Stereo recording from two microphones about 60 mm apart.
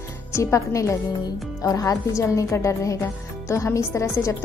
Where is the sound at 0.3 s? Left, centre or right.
Left.